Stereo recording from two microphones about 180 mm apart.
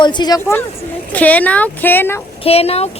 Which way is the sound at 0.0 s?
25° left (ahead or behind).